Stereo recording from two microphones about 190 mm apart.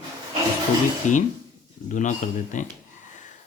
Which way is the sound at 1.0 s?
40° left (ahead or behind).